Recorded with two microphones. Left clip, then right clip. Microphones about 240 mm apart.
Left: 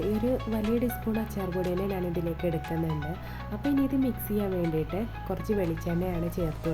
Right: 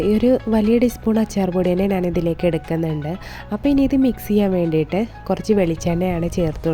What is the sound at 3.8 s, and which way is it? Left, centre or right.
Speech, right.